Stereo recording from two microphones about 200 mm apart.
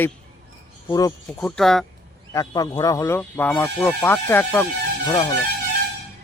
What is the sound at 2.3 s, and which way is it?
Speech, 20° left (ahead or behind).